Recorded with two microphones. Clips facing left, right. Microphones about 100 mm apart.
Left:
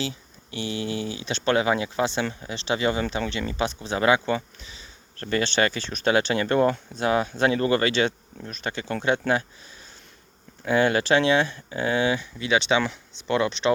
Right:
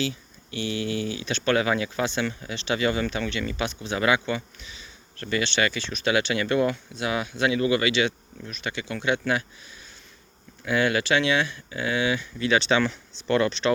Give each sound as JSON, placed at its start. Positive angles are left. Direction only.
{"t": 0.0, "sound": "speech", "side_deg": 30}
{"t": 10.6, "sound": "speech", "side_deg": 30}